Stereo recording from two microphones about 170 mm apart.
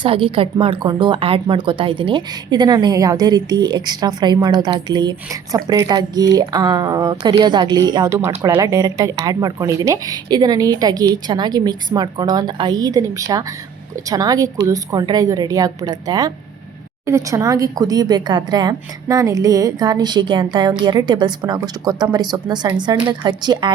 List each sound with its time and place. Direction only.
0.0 s a woman's voice: 30° right (ahead or behind)